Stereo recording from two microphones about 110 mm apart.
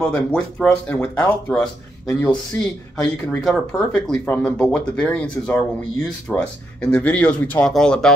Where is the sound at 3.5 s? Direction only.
Centre (ahead or behind).